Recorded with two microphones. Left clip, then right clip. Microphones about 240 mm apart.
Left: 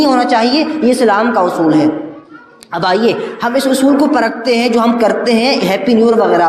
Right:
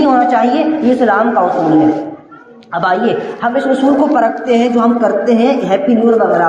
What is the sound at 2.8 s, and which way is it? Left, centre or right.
A woman's voice, left.